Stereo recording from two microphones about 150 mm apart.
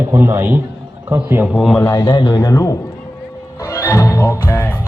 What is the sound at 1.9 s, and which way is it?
A man's voice, 25° left (ahead or behind).